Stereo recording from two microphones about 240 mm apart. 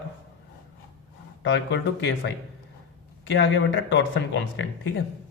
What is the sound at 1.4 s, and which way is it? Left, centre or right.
Speech, left.